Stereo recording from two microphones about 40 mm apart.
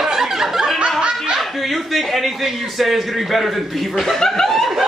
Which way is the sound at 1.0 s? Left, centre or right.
Centre.